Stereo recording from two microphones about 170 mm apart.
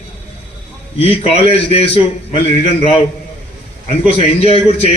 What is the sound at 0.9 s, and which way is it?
Speech, 35° left (ahead or behind).